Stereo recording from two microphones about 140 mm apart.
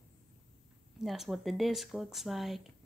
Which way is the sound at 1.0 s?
Centre (ahead or behind).